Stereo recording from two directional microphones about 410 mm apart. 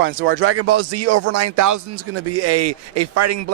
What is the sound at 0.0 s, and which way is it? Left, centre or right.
Speech, right.